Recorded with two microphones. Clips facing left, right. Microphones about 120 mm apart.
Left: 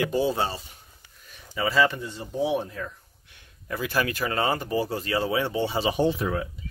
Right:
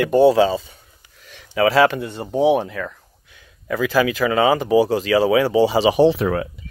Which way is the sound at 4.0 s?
90° right.